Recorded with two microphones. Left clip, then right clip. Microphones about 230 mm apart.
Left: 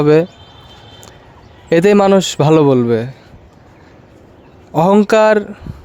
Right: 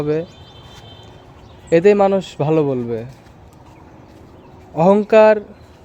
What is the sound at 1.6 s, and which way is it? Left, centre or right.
Speech, left.